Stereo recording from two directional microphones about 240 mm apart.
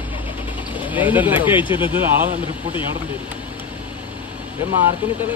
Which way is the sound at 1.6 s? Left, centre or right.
Centre.